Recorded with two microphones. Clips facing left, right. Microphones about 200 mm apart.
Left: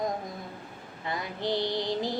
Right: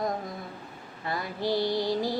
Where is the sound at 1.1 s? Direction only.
20° left (ahead or behind).